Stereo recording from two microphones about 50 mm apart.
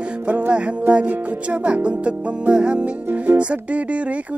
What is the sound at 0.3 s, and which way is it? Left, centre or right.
Music, right.